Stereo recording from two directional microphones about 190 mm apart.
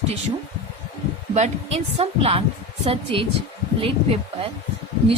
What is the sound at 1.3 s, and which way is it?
A woman's voice, 35° right (ahead or behind).